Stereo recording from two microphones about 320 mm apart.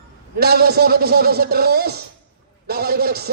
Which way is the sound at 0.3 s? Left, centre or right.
Right.